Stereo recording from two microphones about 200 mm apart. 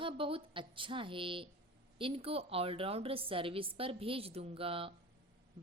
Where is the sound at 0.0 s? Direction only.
25° right (ahead or behind).